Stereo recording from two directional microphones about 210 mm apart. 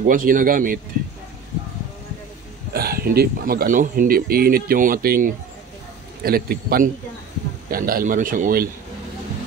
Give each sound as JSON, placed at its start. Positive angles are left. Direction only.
{"t": 0.0, "sound": "a man's voice", "side_deg": -40}
{"t": 2.7, "sound": "a man's voice", "side_deg": -45}